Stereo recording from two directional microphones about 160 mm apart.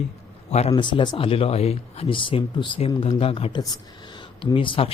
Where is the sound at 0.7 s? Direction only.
30° left (ahead or behind).